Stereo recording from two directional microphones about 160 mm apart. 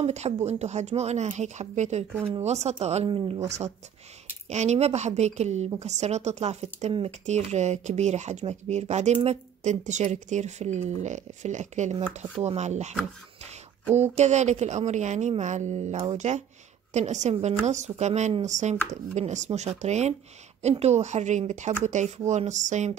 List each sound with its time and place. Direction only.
0.0 s speech: 45° right (ahead or behind)
13.9 s speech: 45° right (ahead or behind)